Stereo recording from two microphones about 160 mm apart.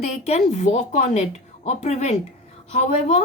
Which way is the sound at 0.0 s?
45° left (ahead or behind).